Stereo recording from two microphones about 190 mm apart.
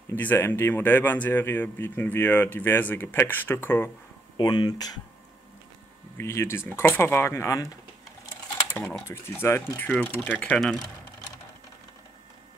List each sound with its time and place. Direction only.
0.1 s speech: 10° left (ahead or behind)
4.4 s speech: 25° left (ahead or behind)
6.1 s speech: 15° left (ahead or behind)
9.0 s speech: 15° left (ahead or behind)